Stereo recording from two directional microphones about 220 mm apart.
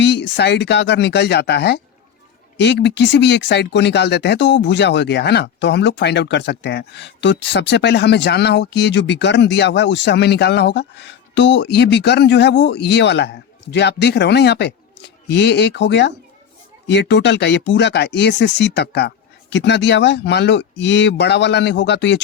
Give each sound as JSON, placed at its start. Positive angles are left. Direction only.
{"t": 0.0, "sound": "speech", "side_deg": 50}